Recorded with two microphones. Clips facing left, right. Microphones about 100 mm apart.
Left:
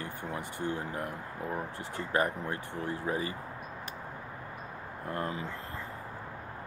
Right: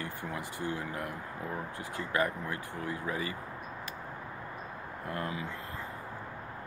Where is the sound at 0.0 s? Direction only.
30° left (ahead or behind).